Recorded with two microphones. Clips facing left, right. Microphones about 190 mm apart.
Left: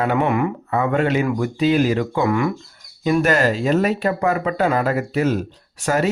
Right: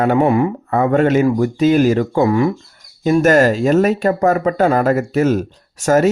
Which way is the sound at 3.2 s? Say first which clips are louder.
Right 6 dB; 45° right (ahead or behind).